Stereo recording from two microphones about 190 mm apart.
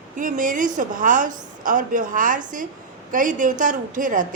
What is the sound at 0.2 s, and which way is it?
A woman's voice, 45° right (ahead or behind).